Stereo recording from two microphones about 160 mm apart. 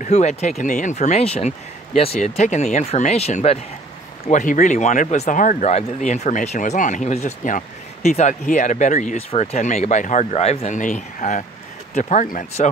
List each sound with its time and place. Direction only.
0.0 s speech: 45° left (ahead or behind)
4.3 s speech: 55° left (ahead or behind)